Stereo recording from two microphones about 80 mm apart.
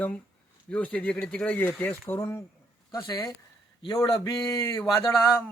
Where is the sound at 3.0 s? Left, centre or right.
Left.